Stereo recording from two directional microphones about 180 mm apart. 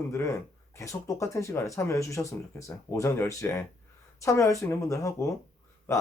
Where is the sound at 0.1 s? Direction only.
15° left (ahead or behind).